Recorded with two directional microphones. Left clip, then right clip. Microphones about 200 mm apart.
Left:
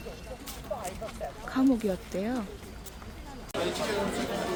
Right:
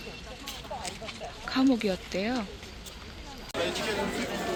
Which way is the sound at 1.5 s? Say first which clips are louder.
Right 1 dB; 5° left (ahead or behind).